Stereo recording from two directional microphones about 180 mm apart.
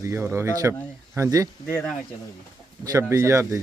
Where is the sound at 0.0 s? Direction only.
15° right (ahead or behind).